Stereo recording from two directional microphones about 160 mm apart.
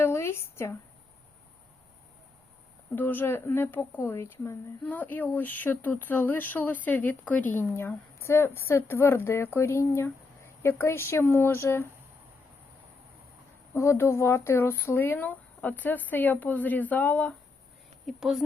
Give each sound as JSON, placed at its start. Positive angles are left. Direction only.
{"t": 0.0, "sound": "a sound", "side_deg": 15}
{"t": 2.9, "sound": "a woman's voice", "side_deg": 10}
{"t": 13.7, "sound": "a woman's voice", "side_deg": 15}
{"t": 18.0, "sound": "a woman's voice", "side_deg": 0}